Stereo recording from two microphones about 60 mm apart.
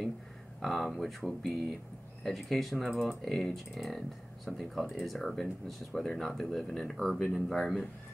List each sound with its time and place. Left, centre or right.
0.6 s speech: centre